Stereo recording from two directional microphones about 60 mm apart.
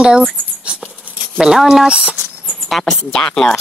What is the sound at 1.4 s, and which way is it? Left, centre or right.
Speech, centre.